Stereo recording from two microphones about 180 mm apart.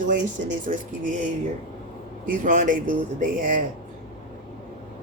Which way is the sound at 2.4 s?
45° right (ahead or behind).